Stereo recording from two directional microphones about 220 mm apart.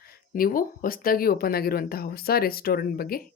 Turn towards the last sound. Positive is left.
turn(degrees=45)  # may be behind; listen again after turning